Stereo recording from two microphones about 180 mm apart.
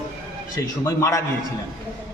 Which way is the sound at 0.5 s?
20° left (ahead or behind).